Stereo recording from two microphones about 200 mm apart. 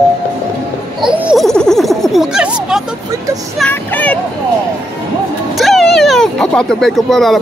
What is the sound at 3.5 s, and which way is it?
Speech, 5° left (ahead or behind).